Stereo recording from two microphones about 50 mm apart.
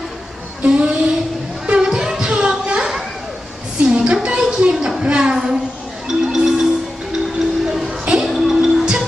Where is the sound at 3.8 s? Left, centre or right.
Centre.